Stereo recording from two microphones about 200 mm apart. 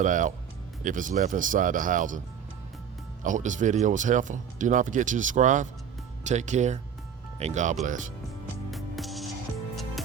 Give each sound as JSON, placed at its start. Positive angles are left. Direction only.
{"t": 0.0, "sound": "speech", "side_deg": -40}
{"t": 3.2, "sound": "speech", "side_deg": -40}
{"t": 8.7, "sound": "music", "side_deg": 0}